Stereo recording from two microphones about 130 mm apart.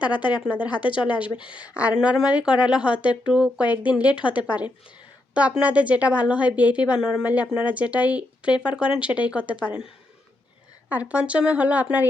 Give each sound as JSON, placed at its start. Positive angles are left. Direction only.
{"t": 0.0, "sound": "speech", "side_deg": 35}
{"t": 1.5, "sound": "a woman's voice", "side_deg": -10}
{"t": 10.8, "sound": "a woman's voice", "side_deg": -10}